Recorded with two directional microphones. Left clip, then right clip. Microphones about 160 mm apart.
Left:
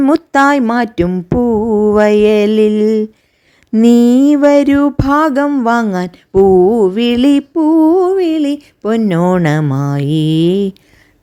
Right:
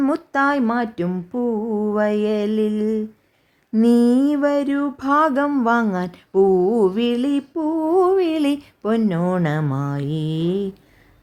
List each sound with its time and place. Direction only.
0.1 s mantra: 35° left (ahead or behind)
5.0 s mantra: 25° left (ahead or behind)
5.5 s speech: 15° left (ahead or behind)
5.7 s mantra: 25° left (ahead or behind)
7.2 s mantra: 40° left (ahead or behind)
7.9 s mantra: 20° left (ahead or behind)
8.8 s speech: 25° left (ahead or behind)
9.0 s mantra: 45° left (ahead or behind)